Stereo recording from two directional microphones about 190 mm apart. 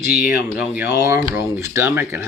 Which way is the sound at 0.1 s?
45° left (ahead or behind).